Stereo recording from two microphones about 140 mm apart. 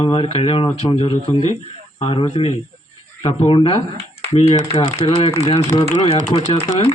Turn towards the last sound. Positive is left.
turn(degrees=50)  # may be behind; listen again after turning